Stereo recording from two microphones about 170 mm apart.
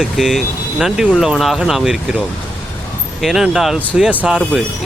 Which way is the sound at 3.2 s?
Centre (ahead or behind).